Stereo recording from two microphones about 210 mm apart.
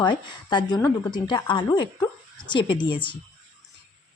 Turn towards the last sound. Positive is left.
turn(degrees=25)  # may be behind; listen again after turning